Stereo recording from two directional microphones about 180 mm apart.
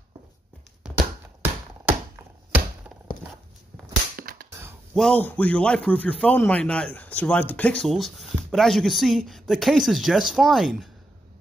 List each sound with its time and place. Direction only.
0.8 s tap: 10° right (ahead or behind)
4.2 s a sound: 50° right (ahead or behind)
4.9 s a man's voice: 5° left (ahead or behind)